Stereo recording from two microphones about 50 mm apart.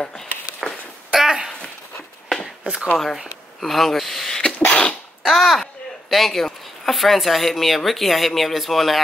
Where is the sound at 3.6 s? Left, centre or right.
Centre.